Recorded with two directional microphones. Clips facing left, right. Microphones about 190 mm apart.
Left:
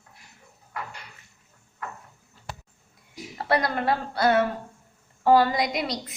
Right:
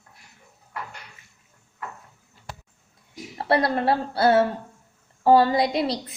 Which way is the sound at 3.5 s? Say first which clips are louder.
Right 3 dB; 30° right (ahead or behind).